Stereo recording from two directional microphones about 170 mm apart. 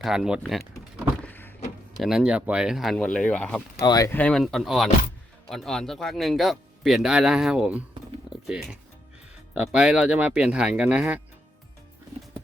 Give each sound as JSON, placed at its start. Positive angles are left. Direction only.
{"t": 0.0, "sound": "a man's voice", "side_deg": -5}
{"t": 1.2, "sound": "a sound", "side_deg": 10}
{"t": 2.0, "sound": "a man's voice", "side_deg": 0}
{"t": 3.8, "sound": "speech", "side_deg": 20}
{"t": 4.1, "sound": "a man's voice", "side_deg": 5}